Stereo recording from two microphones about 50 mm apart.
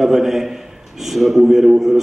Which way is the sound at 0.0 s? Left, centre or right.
Centre.